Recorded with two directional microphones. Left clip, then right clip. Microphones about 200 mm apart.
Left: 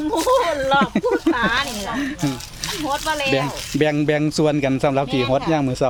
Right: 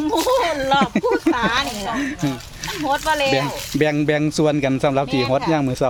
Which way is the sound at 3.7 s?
5° left (ahead or behind).